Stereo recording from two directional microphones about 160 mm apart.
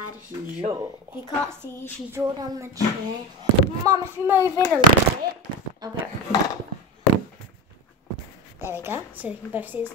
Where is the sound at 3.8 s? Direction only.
15° right (ahead or behind).